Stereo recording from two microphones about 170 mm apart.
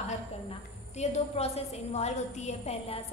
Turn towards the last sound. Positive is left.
turn(degrees=35)  # may be behind; listen again after turning